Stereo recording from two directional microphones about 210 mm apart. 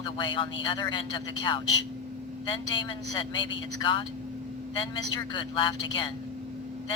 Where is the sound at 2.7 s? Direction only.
20° left (ahead or behind).